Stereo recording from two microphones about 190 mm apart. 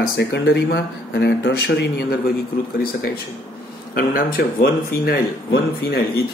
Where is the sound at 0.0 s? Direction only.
60° left (ahead or behind).